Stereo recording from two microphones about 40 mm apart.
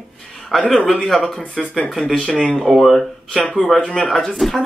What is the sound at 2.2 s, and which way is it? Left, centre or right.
Speech, left.